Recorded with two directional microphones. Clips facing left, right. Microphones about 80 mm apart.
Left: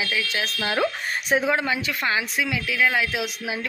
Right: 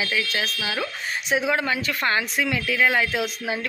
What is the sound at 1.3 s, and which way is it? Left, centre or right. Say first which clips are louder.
Speech: left 1 dB; left.